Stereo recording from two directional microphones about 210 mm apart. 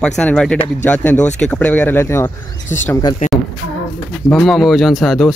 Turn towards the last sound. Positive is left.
turn(degrees=0)  # may be behind; listen again after turning